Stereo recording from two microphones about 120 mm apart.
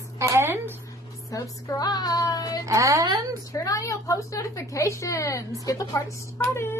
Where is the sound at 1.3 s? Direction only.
35° left (ahead or behind).